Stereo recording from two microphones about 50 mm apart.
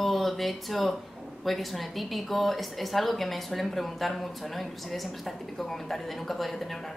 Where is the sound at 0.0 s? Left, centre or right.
Centre.